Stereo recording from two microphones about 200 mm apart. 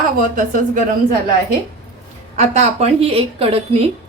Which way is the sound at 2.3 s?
30° right (ahead or behind).